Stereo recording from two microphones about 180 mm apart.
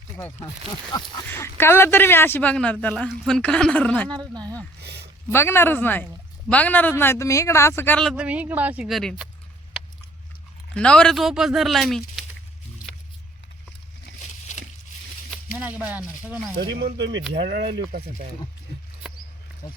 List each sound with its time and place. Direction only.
0.2 s speech: 10° left (ahead or behind)
0.9 s a sound: 20° left (ahead or behind)
1.3 s speech: 15° left (ahead or behind)
4.2 s speech: 25° right (ahead or behind)
4.8 s a sound: 65° right (ahead or behind)
5.3 s speech: 15° left (ahead or behind)
8.1 s speech: 5° right (ahead or behind)
10.8 s speech: 5° left (ahead or behind)
14.5 s a sound: 40° left (ahead or behind)
15.5 s speech: 10° right (ahead or behind)
16.6 s speech: 65° right (ahead or behind); by 17.2 s 85° right
17.3 s speech: 70° right (ahead or behind)